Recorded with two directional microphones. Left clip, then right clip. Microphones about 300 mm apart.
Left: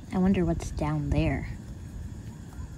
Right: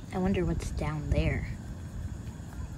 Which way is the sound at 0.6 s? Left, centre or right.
Centre.